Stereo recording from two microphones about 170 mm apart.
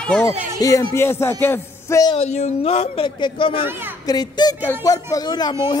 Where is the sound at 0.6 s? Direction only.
20° left (ahead or behind).